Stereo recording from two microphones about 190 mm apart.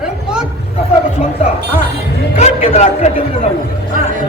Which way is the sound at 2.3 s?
35° left (ahead or behind).